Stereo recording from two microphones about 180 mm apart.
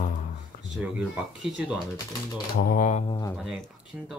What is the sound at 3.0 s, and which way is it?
Speech, 25° left (ahead or behind).